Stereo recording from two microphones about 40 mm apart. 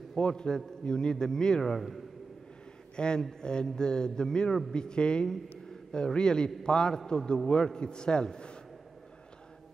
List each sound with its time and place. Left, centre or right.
0.1 s a man's voice: centre
3.0 s a man's voice: left